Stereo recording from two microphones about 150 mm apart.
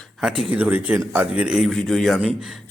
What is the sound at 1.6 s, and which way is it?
Speech, 5° left (ahead or behind).